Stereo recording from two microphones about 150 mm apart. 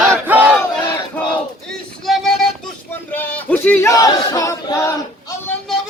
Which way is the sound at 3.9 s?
25° left (ahead or behind).